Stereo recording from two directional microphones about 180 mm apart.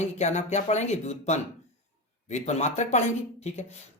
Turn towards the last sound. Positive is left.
turn(degrees=40)  # may be behind; listen again after turning